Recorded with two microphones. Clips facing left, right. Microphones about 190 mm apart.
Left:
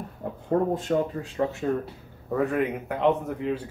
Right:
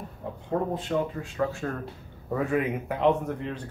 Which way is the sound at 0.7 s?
40° left (ahead or behind).